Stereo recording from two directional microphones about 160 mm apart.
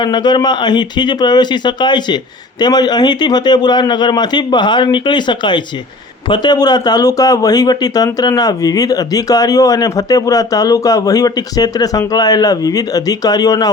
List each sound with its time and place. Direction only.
0.0 s speech: 25° left (ahead or behind)